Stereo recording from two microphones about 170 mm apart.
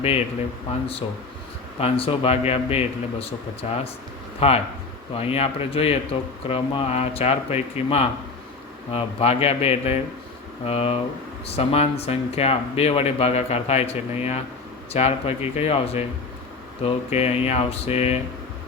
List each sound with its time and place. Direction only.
1.8 s speech: 35° left (ahead or behind)